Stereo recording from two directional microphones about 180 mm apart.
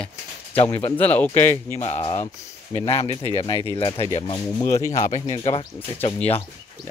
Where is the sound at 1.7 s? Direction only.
35° left (ahead or behind).